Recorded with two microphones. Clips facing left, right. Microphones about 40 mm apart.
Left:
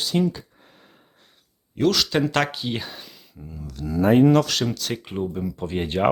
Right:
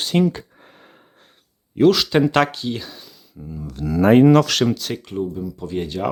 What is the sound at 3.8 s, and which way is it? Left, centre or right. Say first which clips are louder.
Speech: right 4 dB; right.